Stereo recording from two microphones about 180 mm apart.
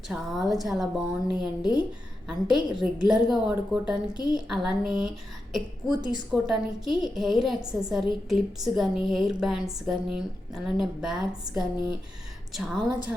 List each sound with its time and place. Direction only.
0.1 s a woman's voice: centre (ahead or behind)